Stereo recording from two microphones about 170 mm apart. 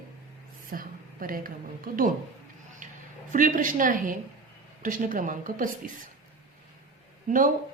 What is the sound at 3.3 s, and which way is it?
A woman's voice, 50° right (ahead or behind).